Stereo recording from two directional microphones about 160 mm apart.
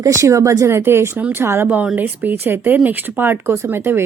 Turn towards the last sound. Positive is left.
turn(degrees=-15)  # may be behind; listen again after turning